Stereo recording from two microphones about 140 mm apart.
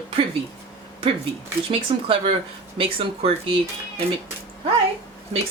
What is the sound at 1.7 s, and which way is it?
Speech, 40° right (ahead or behind).